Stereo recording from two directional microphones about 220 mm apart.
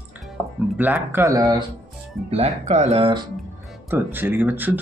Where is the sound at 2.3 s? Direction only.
30° right (ahead or behind).